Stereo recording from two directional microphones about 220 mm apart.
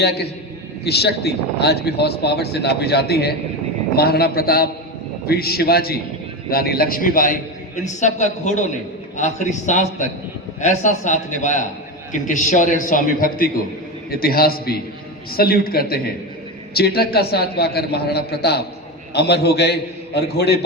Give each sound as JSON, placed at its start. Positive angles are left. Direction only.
{"t": 0.0, "sound": "a man's voice", "side_deg": 50}